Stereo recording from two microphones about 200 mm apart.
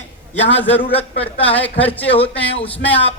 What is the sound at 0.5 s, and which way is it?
Speech, 10° left (ahead or behind).